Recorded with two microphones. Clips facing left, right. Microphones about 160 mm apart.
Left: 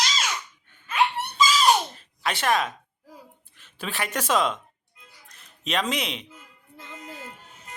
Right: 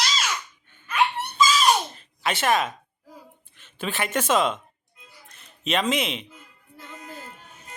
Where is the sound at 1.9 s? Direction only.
Centre (ahead or behind).